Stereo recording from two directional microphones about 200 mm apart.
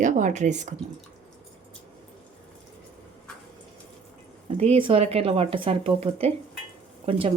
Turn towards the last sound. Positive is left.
turn(degrees=-30)  # may be behind; listen again after turning